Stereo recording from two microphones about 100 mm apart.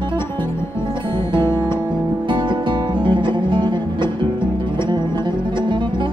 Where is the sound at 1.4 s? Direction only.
25° left (ahead or behind).